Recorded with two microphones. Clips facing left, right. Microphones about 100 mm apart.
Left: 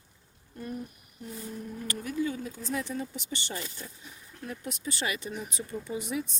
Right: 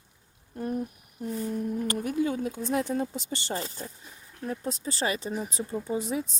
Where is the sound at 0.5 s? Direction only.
50° right (ahead or behind).